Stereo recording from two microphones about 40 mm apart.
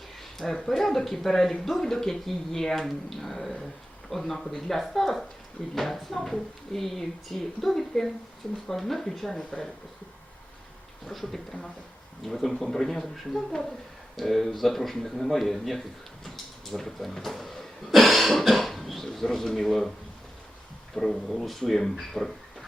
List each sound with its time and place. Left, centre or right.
0.2 s a woman's voice: centre
9.4 s speech: left
11.0 s a woman's voice: centre
16.7 s cough: centre
20.9 s a woman's voice: centre